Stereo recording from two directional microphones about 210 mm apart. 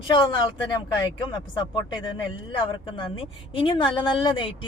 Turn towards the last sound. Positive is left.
turn(degrees=25)  # may be behind; listen again after turning